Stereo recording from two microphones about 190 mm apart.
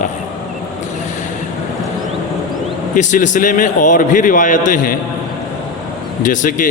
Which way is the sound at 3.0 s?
40° left (ahead or behind).